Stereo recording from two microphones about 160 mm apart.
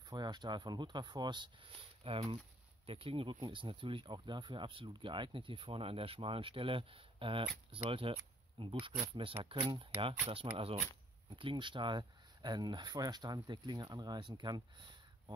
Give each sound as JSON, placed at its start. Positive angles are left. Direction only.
{"t": 0.1, "sound": "speech", "side_deg": -25}